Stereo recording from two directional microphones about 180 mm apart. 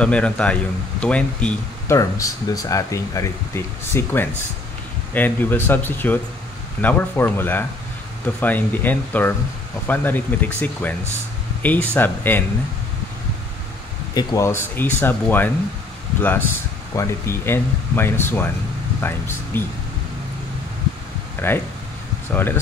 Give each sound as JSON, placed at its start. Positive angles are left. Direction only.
{"t": 0.0, "sound": "speech", "side_deg": 5}
{"t": 2.0, "sound": "speech", "side_deg": 20}
{"t": 14.1, "sound": "speech", "side_deg": 15}
{"t": 21.4, "sound": "speech", "side_deg": 10}